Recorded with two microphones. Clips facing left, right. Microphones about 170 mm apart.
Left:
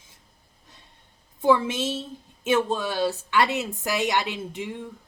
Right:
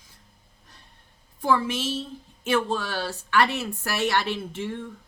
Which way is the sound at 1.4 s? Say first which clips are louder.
Left 3 dB; 20° left (ahead or behind).